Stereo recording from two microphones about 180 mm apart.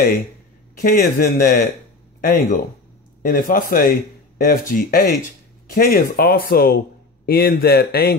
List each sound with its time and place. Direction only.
0.7 s a man's voice: 50° left (ahead or behind)